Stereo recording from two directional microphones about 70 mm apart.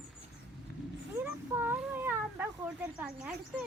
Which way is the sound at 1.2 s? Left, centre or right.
Right.